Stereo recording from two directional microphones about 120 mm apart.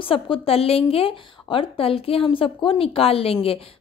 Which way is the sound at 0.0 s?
50° left (ahead or behind).